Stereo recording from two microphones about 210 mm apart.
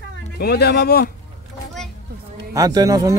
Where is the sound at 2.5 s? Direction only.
15° right (ahead or behind).